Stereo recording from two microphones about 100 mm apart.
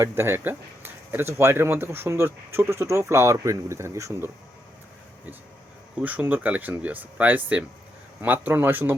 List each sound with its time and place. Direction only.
0.0 s speech: 25° right (ahead or behind)
6.0 s speech: 15° right (ahead or behind)